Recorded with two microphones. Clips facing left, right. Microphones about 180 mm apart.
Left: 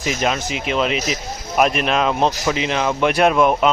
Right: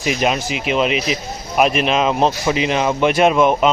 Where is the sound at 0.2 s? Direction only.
10° right (ahead or behind).